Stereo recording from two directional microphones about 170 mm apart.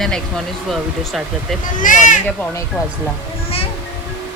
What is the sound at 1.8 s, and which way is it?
Speech, 50° left (ahead or behind).